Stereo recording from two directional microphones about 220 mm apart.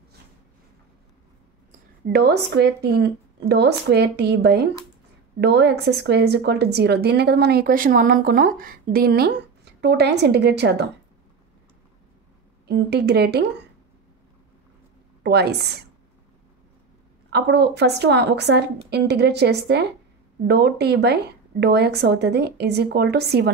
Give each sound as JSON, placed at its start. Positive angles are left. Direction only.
{"t": 2.1, "sound": "a woman's voice", "side_deg": -45}
{"t": 12.6, "sound": "a woman's voice", "side_deg": -50}
{"t": 15.2, "sound": "a woman's voice", "side_deg": -50}
{"t": 17.3, "sound": "a woman's voice", "side_deg": -50}